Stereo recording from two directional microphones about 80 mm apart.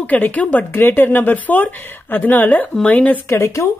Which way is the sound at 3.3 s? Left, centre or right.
Left.